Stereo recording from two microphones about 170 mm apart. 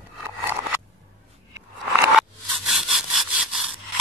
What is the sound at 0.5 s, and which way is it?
Scissors, 15° right (ahead or behind).